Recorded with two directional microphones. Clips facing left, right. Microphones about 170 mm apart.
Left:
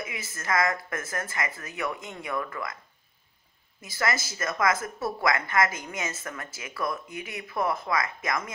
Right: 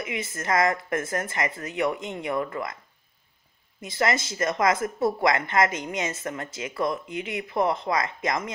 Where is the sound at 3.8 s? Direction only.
25° right (ahead or behind).